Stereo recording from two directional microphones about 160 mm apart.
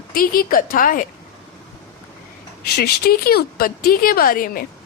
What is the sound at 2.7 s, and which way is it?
Speech, 80° left.